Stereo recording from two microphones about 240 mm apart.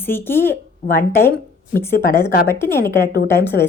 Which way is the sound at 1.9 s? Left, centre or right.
Left.